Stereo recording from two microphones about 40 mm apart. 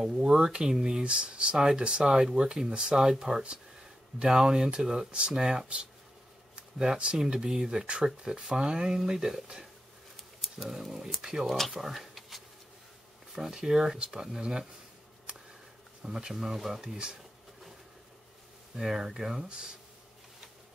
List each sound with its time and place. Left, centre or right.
0.0 s speech: centre
6.8 s speech: right
7.8 s speech: right; by 11.3 s centre
11.4 s speech: centre
11.7 s a sound: centre
13.3 s speech: centre
16.0 s speech: centre
16.3 s speech: centre
16.9 s speech: centre
18.8 s speech: centre